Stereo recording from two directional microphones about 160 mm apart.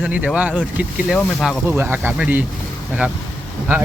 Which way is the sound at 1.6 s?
15° right (ahead or behind).